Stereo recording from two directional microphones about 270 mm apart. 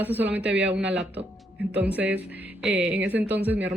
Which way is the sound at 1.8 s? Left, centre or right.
Centre.